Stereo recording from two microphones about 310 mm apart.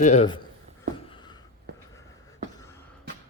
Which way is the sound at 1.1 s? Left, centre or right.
Centre.